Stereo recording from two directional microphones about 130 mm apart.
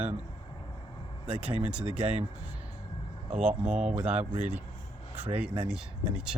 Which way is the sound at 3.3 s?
5° right (ahead or behind).